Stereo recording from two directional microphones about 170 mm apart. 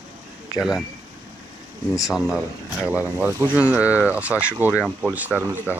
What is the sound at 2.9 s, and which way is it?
Speech, 10° right (ahead or behind).